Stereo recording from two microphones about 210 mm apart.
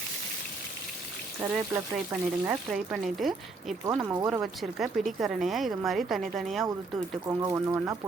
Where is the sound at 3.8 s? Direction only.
15° right (ahead or behind).